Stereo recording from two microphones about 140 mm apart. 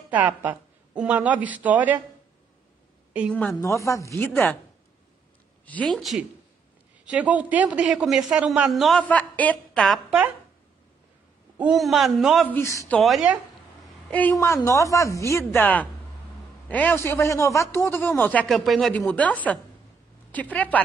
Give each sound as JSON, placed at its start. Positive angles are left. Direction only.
{"t": 0.1, "sound": "a woman's voice", "side_deg": -10}
{"t": 3.5, "sound": "a woman's voice", "side_deg": 20}
{"t": 5.7, "sound": "speech", "side_deg": 5}
{"t": 9.0, "sound": "a woman's voice", "side_deg": 10}
{"t": 11.5, "sound": "speech", "side_deg": -5}
{"t": 12.4, "sound": "a man's voice", "side_deg": 20}
{"t": 12.9, "sound": "speech", "side_deg": 0}
{"t": 14.4, "sound": "a woman's voice", "side_deg": 20}